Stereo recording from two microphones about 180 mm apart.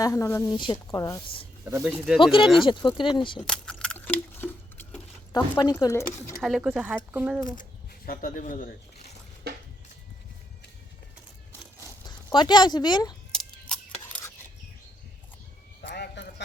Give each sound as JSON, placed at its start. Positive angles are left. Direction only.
{"t": 0.0, "sound": "speech", "side_deg": 15}
{"t": 1.6, "sound": "speech", "side_deg": -10}
{"t": 2.6, "sound": "speech", "side_deg": 25}
{"t": 3.4, "sound": "a sound", "side_deg": 5}
{"t": 5.3, "sound": "speech", "side_deg": 20}
{"t": 6.4, "sound": "speech", "side_deg": -5}
{"t": 7.6, "sound": "speech", "side_deg": 50}
{"t": 12.0, "sound": "speech", "side_deg": 25}
{"t": 13.3, "sound": "a sound", "side_deg": 5}
{"t": 15.8, "sound": "a sound", "side_deg": 70}